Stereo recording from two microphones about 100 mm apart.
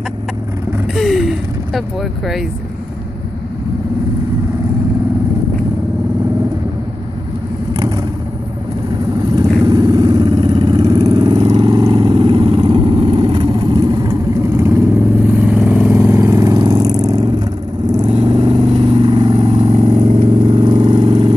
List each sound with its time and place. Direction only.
0.9 s vehicle: centre (ahead or behind)
9.3 s vehicle: 40° right (ahead or behind)
14.6 s vehicle: 25° right (ahead or behind); by 17.3 s 40° right (ahead or behind)
18.1 s vehicle: 60° right (ahead or behind)